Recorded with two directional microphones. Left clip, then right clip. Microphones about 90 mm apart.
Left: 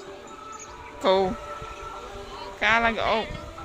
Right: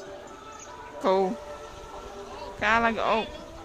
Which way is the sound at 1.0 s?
25° right (ahead or behind).